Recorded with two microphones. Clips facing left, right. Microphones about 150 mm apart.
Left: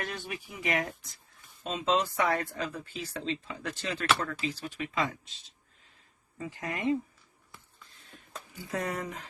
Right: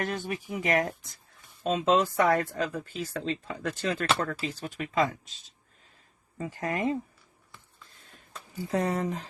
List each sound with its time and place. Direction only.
0.0 s speech: 45° right (ahead or behind)
6.3 s speech: 40° right (ahead or behind)
8.7 s speech: 30° right (ahead or behind)